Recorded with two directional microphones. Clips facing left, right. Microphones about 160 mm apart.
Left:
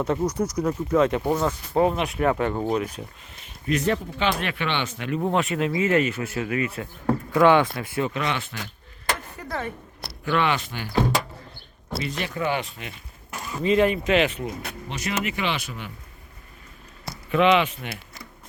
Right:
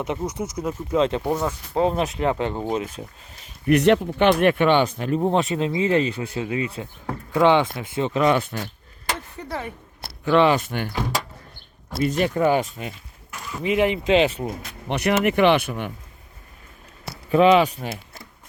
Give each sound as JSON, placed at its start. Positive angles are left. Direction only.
{"t": 0.2, "sound": "speech", "side_deg": -5}
{"t": 0.9, "sound": "speech", "side_deg": -25}
{"t": 1.2, "sound": "speech", "side_deg": -10}
{"t": 1.8, "sound": "speech", "side_deg": -25}
{"t": 3.7, "sound": "speech", "side_deg": -70}
{"t": 8.2, "sound": "speech", "side_deg": -45}
{"t": 9.5, "sound": "speech", "side_deg": -15}
{"t": 10.2, "sound": "speech", "side_deg": -30}
{"t": 10.7, "sound": "speech", "side_deg": -55}
{"t": 11.9, "sound": "speech", "side_deg": -45}
{"t": 13.6, "sound": "speech", "side_deg": -15}
{"t": 14.8, "sound": "speech", "side_deg": -65}
{"t": 17.3, "sound": "speech", "side_deg": -35}